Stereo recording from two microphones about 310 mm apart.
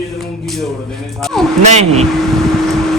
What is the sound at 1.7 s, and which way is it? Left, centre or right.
Speech, centre.